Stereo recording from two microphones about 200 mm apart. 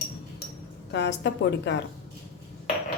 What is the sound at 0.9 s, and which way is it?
Speech, 60° left (ahead or behind).